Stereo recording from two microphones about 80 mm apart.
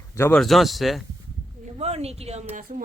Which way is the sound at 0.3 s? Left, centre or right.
Centre.